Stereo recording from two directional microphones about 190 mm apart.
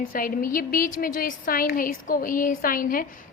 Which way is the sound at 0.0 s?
50° left (ahead or behind).